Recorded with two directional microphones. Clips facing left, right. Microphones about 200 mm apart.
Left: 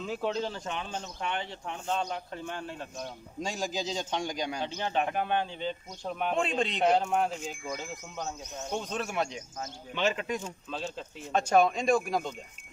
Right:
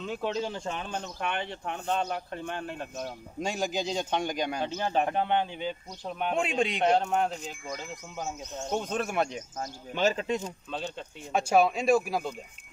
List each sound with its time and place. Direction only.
0.0 s speech: centre (ahead or behind)
0.8 s a man's voice: 60° right (ahead or behind); by 5.8 s 15° right (ahead or behind)
6.0 s speech: centre (ahead or behind)
6.3 s speech: 10° right (ahead or behind)
6.8 s speech: centre (ahead or behind)
8.7 s speech: 55° right (ahead or behind)
10.2 s speech: 25° right (ahead or behind)
10.7 s speech: centre (ahead or behind)